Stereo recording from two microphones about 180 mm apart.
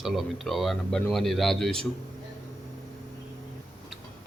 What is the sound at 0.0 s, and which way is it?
Speech, centre (ahead or behind).